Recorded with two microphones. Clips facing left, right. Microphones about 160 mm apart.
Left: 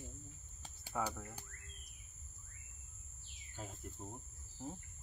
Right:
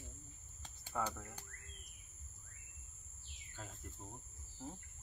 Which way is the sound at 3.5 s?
15° left (ahead or behind).